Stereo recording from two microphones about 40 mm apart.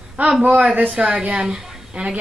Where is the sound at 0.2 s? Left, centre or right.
Right.